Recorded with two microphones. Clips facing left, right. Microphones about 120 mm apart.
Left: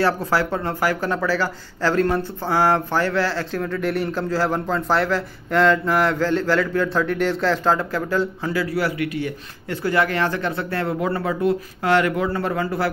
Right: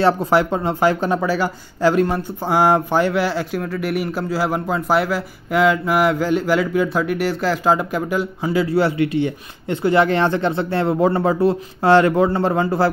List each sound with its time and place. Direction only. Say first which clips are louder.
0.0 s speech: right 4 dB; 20° right (ahead or behind)
8.6 s speech: right 5 dB; 25° right (ahead or behind)